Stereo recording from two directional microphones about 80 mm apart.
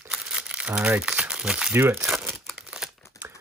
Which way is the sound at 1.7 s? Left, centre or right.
Right.